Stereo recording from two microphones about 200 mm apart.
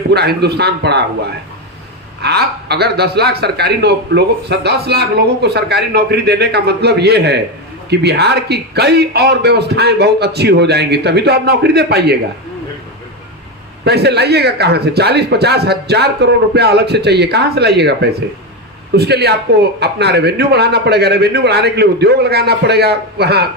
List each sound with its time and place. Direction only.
0.1 s speech: 55° right (ahead or behind)
13.8 s speech: 55° right (ahead or behind)